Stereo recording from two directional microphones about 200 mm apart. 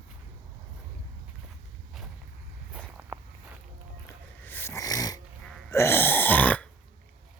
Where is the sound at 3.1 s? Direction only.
10° right (ahead or behind).